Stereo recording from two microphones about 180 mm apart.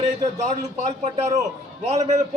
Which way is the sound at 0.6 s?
40° right (ahead or behind).